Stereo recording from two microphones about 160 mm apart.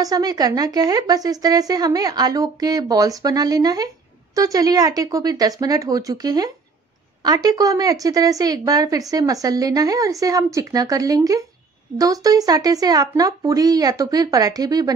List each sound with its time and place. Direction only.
0.0 s a woman's voice: 25° right (ahead or behind)